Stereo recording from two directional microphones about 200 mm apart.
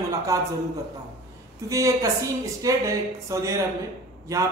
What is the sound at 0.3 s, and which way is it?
Speech, 15° right (ahead or behind).